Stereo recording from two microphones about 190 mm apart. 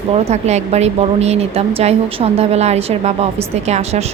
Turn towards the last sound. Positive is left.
turn(degrees=-35)  # may be behind; listen again after turning